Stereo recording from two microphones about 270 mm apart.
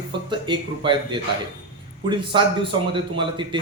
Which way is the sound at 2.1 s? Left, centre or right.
Centre.